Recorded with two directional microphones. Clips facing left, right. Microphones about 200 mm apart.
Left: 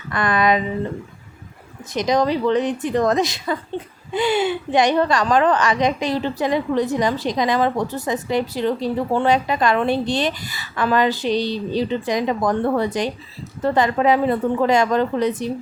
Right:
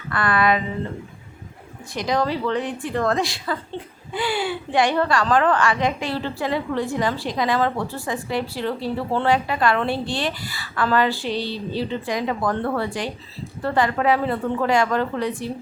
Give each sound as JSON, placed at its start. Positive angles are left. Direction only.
{"t": 0.1, "sound": "a woman's voice", "side_deg": 20}
{"t": 1.9, "sound": "a woman's voice", "side_deg": 20}